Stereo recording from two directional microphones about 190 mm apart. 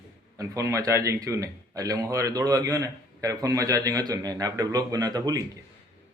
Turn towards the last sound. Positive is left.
turn(degrees=-20)  # may be behind; listen again after turning